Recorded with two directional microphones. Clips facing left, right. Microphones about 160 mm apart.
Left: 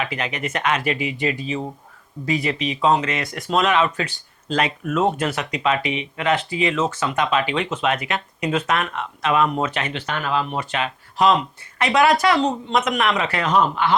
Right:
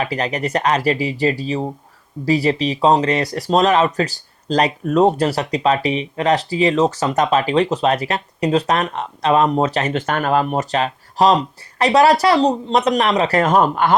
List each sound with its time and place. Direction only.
0.0 s speech: 35° right (ahead or behind)